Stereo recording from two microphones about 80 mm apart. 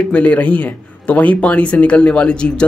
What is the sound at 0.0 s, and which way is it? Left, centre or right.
A man's voice, centre.